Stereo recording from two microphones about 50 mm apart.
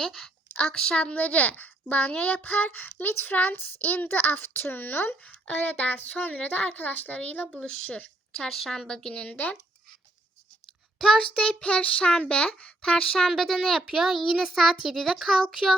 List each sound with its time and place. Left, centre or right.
0.0 s child singing: centre
0.5 s a woman's voice: centre
7.5 s child singing: centre
10.9 s child singing: centre
13.2 s a child's voice: centre